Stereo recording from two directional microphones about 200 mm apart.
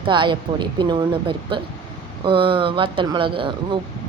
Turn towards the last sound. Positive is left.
turn(degrees=-25)  # may be behind; listen again after turning